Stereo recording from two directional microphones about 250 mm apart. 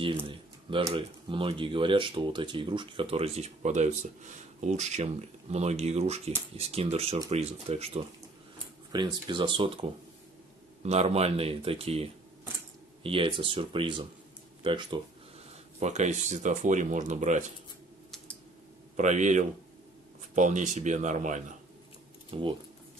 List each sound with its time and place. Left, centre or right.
0.3 s speech: centre
18.9 s speech: right